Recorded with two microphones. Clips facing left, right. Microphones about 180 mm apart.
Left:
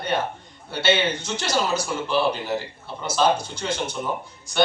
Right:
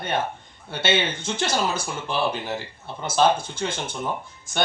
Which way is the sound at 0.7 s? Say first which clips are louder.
Left 2 dB; 50° right (ahead or behind).